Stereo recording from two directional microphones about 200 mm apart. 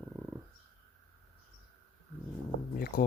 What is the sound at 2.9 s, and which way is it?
Speech, 45° left (ahead or behind).